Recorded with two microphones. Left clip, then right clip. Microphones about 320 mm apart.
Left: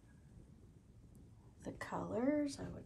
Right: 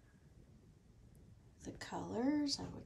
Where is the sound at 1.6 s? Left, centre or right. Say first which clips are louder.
Left 2 dB; centre.